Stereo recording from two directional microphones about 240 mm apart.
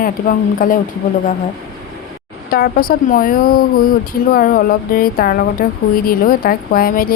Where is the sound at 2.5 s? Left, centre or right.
Left.